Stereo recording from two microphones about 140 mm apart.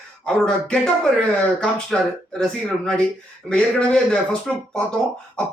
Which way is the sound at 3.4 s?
5° left (ahead or behind).